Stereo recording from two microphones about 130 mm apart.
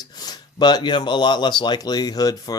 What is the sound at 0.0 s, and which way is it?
Speech, 30° left (ahead or behind).